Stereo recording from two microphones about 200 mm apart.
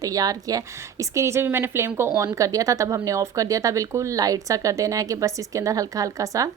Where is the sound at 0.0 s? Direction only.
15° right (ahead or behind).